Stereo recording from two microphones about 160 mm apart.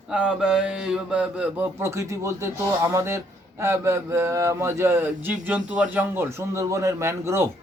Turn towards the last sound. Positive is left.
turn(degrees=-15)  # may be behind; listen again after turning